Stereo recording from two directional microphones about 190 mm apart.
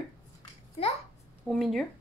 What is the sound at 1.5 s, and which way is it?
Speech, centre (ahead or behind).